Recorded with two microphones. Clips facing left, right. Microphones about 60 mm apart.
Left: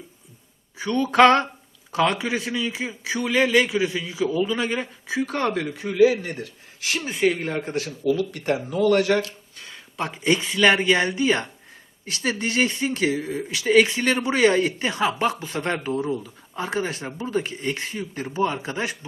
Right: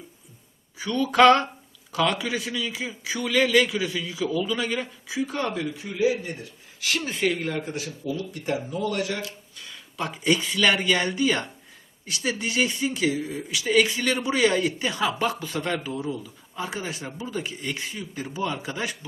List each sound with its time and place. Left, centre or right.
0.8 s a man's voice: left
5.2 s speech: left
6.8 s speech: centre
7.3 s a man's voice: left
7.6 s speech: left
8.0 s speech: left
9.6 s a man's voice: left
12.0 s speech: left